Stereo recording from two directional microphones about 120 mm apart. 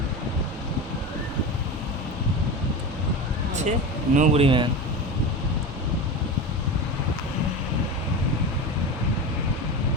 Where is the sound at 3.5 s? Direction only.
85° right; by 4.7 s 45° right (ahead or behind).